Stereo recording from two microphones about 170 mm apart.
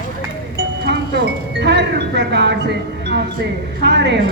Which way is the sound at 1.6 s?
90° right.